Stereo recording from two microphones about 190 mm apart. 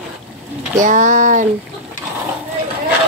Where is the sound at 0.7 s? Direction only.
40° right (ahead or behind).